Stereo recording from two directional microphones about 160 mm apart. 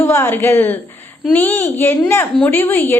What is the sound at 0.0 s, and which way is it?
A woman's voice, 15° left (ahead or behind).